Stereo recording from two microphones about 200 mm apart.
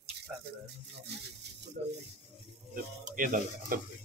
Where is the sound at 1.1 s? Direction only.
55° right (ahead or behind).